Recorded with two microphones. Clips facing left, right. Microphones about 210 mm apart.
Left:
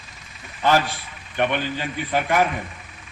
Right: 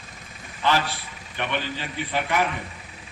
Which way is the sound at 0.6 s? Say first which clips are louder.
Left 4 dB; 45° left (ahead or behind).